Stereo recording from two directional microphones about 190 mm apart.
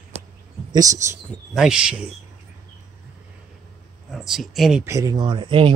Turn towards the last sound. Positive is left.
turn(degrees=-25)  # may be behind; listen again after turning